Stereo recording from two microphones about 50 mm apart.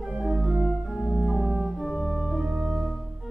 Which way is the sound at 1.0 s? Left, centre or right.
Centre.